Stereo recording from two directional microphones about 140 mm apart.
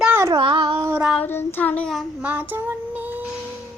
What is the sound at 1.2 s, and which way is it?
Child singing, 15° left (ahead or behind).